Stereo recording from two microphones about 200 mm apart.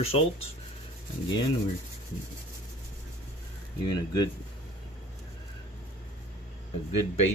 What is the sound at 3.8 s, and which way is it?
Speech, 20° left (ahead or behind).